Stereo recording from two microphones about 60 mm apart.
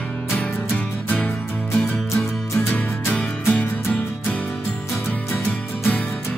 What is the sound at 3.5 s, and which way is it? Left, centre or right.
Music, left.